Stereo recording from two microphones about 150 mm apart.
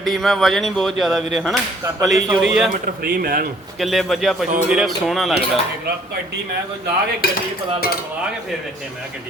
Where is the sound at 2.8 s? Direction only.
75° right (ahead or behind).